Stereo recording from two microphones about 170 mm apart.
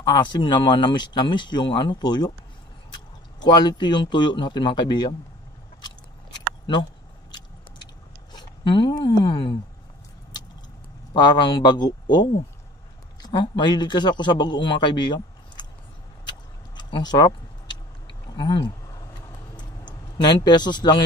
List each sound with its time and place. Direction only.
0.0 s a man's voice: 30° left (ahead or behind)
3.4 s a man's voice: 25° left (ahead or behind)
6.6 s vehicle: 25° left (ahead or behind)
11.1 s a man's voice: 25° left (ahead or behind)
16.3 s vehicle: 25° left (ahead or behind)
19.9 s a man's voice: 25° left (ahead or behind)